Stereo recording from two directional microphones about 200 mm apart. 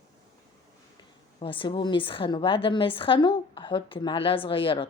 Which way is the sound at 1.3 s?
25° left (ahead or behind).